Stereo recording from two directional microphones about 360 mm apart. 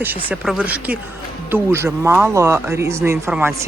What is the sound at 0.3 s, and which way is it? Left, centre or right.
Speech, centre.